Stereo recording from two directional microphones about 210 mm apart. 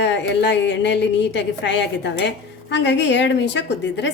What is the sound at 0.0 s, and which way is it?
A woman's voice, 55° left (ahead or behind).